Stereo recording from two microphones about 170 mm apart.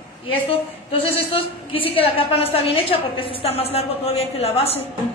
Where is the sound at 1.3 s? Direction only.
35° left (ahead or behind).